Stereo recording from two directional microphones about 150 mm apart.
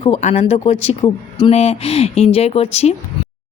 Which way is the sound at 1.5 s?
45° left (ahead or behind).